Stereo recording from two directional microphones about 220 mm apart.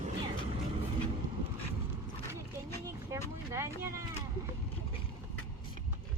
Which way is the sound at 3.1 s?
10° right (ahead or behind).